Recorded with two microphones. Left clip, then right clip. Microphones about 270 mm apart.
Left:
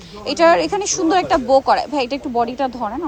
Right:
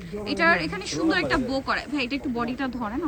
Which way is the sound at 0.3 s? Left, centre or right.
Centre.